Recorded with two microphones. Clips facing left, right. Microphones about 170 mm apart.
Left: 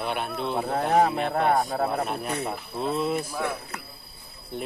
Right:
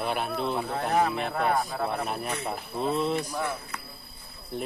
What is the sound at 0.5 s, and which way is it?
Speech, 45° left (ahead or behind).